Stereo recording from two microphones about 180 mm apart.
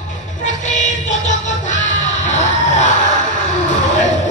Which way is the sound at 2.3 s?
40° left (ahead or behind).